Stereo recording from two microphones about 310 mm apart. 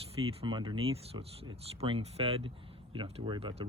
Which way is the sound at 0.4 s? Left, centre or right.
Centre.